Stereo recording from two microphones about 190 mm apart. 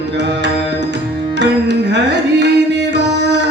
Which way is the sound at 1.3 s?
65° right (ahead or behind).